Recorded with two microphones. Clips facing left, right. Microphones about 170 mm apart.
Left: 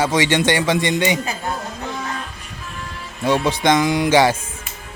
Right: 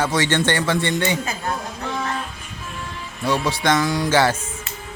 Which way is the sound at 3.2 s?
20° left (ahead or behind).